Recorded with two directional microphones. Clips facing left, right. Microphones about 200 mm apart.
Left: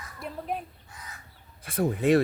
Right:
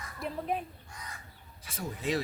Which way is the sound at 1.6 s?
55° left (ahead or behind).